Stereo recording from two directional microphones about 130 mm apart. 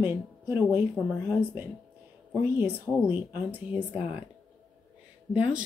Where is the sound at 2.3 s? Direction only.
15° right (ahead or behind).